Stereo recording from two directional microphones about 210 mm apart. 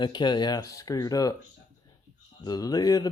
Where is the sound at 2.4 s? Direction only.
20° left (ahead or behind).